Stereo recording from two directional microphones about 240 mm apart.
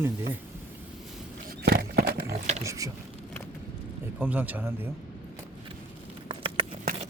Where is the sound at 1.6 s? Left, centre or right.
Right.